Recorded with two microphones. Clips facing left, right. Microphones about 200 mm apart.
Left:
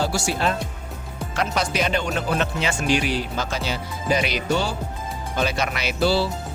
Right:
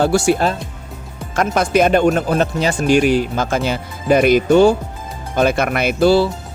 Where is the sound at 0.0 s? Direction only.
55° right (ahead or behind).